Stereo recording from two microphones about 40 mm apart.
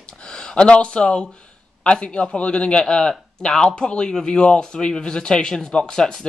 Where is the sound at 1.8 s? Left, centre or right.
Left.